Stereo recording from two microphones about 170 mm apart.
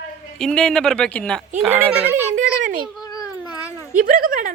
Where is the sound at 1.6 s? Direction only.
10° right (ahead or behind).